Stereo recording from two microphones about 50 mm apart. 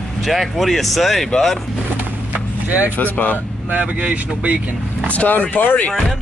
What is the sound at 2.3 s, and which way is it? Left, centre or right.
Vehicle, right.